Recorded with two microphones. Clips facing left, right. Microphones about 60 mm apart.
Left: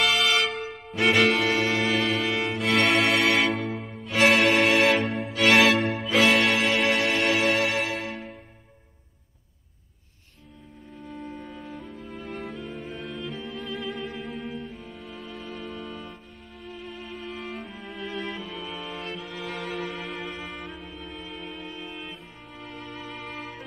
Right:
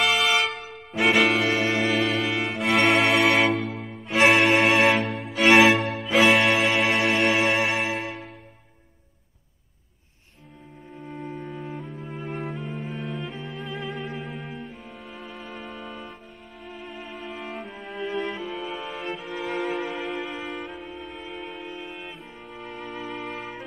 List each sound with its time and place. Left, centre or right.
0.0 s music: centre
1.7 s music: centre
3.4 s music: centre
4.5 s music: right
4.9 s music: centre
5.4 s music: centre
5.8 s music: centre
6.1 s music: centre
11.2 s music: centre
11.9 s music: right
12.2 s music: centre
14.2 s cello: centre
14.7 s music: centre
15.0 s music: centre